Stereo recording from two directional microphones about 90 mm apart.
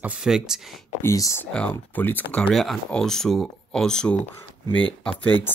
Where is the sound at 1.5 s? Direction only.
15° left (ahead or behind).